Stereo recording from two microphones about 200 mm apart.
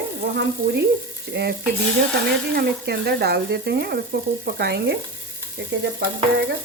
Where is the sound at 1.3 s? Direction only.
55° right (ahead or behind).